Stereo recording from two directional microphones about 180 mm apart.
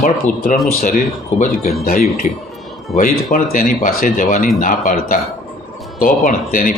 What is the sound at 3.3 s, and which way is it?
Speech, 50° left (ahead or behind).